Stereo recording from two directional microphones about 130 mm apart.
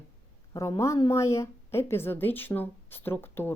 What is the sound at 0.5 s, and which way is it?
Speech, 25° left (ahead or behind).